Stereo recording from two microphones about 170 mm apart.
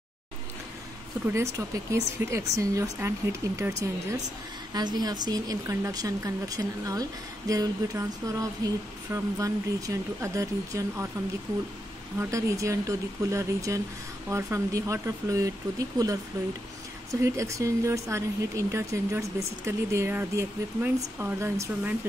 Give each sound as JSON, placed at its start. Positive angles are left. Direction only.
{"t": 1.2, "sound": "speech", "side_deg": -15}
{"t": 12.2, "sound": "speech", "side_deg": -20}